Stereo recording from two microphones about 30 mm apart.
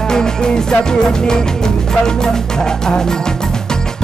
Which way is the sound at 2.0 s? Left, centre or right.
Left.